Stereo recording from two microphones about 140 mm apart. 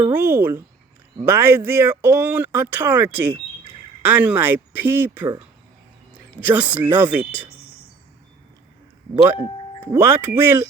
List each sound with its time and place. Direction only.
0.1 s speech: 15° right (ahead or behind)
9.9 s speech: 15° right (ahead or behind)